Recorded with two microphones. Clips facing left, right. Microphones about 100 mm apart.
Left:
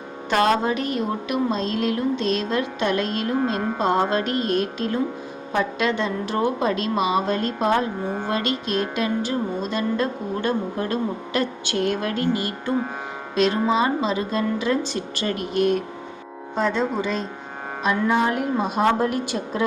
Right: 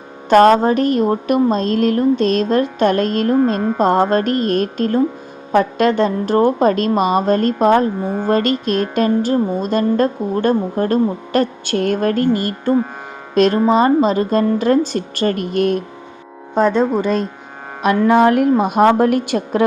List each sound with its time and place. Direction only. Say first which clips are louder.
0.3 s a woman's voice: right 9 dB; 50° right (ahead or behind)
17.8 s a woman's voice: right 9 dB; 60° right (ahead or behind)